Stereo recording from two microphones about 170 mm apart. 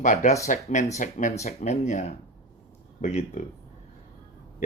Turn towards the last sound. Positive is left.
turn(degrees=40)  # may be behind; listen again after turning